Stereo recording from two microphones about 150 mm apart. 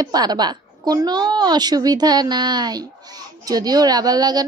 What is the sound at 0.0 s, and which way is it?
A woman's voice, 25° right (ahead or behind).